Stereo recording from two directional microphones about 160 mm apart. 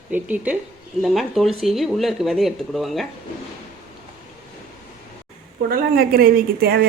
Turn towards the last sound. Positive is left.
turn(degrees=-70)  # may be behind; listen again after turning